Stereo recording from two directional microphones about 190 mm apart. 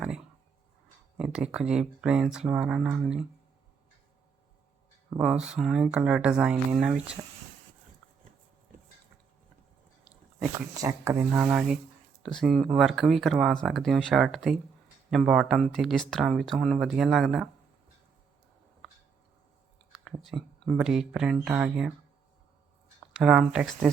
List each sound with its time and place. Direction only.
1.1 s speech: 5° right (ahead or behind)
5.1 s speech: 5° right (ahead or behind)
10.8 s speech: 15° right (ahead or behind)
20.2 s speech: centre (ahead or behind)
23.1 s speech: 5° right (ahead or behind)